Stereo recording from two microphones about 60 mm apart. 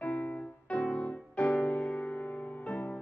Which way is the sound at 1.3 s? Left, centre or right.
Left.